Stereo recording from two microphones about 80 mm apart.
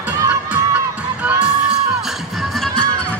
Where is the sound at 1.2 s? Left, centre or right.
Centre.